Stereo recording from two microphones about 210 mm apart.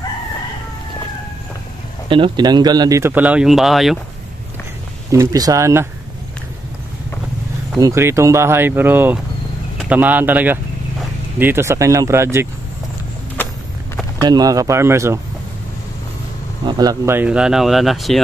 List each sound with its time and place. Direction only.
2.0 s speech: 25° right (ahead or behind); by 4.0 s centre (ahead or behind)
5.1 s speech: 15° right (ahead or behind)
7.7 s speech: 10° right (ahead or behind)
14.2 s speech: 20° right (ahead or behind)
16.6 s speech: 20° right (ahead or behind); by 18.2 s centre (ahead or behind)